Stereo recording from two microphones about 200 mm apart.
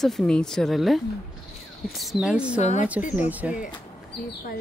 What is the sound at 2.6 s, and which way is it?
Speech, 35° left (ahead or behind).